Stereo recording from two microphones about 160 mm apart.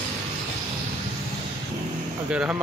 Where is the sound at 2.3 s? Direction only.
10° right (ahead or behind).